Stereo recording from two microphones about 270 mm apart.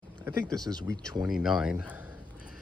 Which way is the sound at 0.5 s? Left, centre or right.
Centre.